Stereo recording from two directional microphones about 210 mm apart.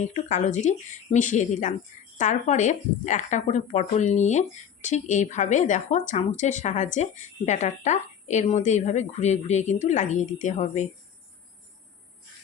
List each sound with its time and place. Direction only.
0.0 s a woman's voice: 35° left (ahead or behind)